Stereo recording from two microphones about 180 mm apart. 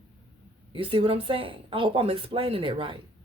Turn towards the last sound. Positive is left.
turn(degrees=-30)  # may be behind; listen again after turning